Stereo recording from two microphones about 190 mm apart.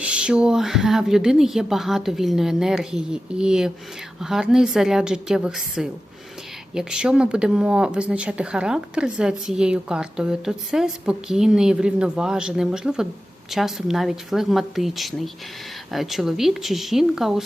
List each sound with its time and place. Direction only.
0.0 s speech: 5° right (ahead or behind)